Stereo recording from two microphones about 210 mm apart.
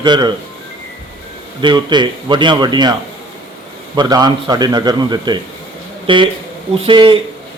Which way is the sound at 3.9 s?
20° right (ahead or behind).